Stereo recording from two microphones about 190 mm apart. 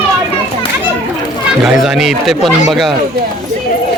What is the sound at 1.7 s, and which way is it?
Speech, 5° right (ahead or behind).